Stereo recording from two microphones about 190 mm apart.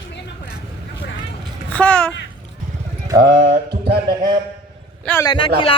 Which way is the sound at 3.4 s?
55° right (ahead or behind).